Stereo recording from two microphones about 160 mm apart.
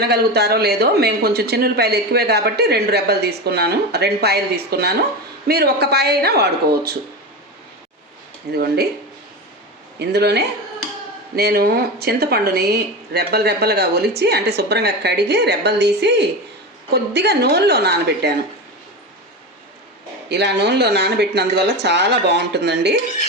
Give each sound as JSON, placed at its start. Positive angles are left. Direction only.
{"t": 0.1, "sound": "speech", "side_deg": -90}
{"t": 8.5, "sound": "speech", "side_deg": -80}
{"t": 10.0, "sound": "speech", "side_deg": -90}
{"t": 11.3, "sound": "speech", "side_deg": -75}
{"t": 20.3, "sound": "speech", "side_deg": -90}